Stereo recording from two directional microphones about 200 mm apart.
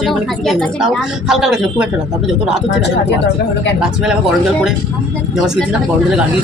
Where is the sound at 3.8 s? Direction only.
5° right (ahead or behind).